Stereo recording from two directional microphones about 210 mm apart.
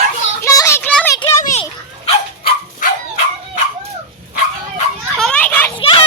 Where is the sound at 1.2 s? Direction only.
20° left (ahead or behind).